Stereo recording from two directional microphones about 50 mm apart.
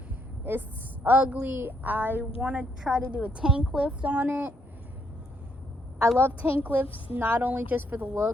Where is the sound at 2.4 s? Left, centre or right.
Right.